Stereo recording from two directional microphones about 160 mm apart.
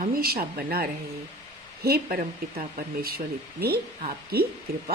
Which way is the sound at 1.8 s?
70° right (ahead or behind).